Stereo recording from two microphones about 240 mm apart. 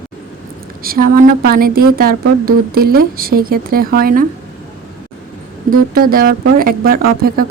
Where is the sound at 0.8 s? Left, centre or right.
Right.